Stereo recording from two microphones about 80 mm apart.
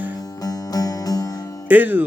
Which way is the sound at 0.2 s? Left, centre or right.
Left.